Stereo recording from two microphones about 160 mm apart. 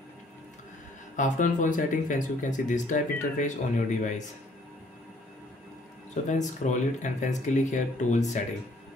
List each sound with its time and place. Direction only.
1.1 s speech: 50° left (ahead or behind)
6.2 s speech: 50° left (ahead or behind)